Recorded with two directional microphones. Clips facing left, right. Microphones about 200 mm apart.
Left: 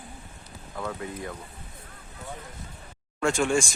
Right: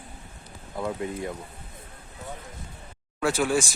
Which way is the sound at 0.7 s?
20° right (ahead or behind).